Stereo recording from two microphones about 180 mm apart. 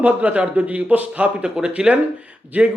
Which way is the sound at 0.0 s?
10° right (ahead or behind).